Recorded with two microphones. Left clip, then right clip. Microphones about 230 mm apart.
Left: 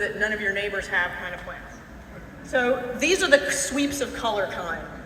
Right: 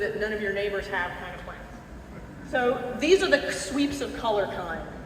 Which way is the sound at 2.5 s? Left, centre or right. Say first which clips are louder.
Left 2 dB; left.